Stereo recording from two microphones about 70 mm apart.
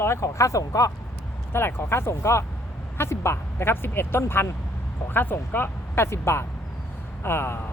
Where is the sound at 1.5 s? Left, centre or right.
Left.